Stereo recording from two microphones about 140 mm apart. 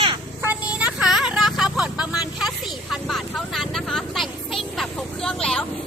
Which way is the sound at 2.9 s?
Centre (ahead or behind).